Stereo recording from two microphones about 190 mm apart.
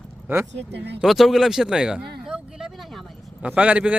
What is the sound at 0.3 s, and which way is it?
Speech, 10° right (ahead or behind).